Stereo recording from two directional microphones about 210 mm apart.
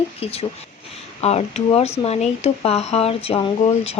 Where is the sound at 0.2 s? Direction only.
30° left (ahead or behind).